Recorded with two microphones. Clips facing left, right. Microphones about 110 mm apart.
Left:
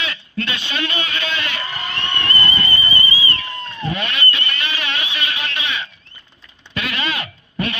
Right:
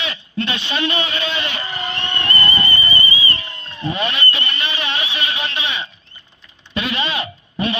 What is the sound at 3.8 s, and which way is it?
Speech, 30° right (ahead or behind).